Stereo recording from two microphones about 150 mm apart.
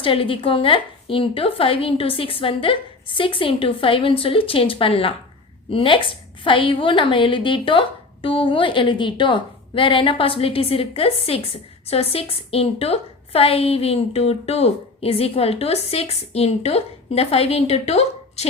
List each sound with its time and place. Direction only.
0.0 s speech: 35° left (ahead or behind)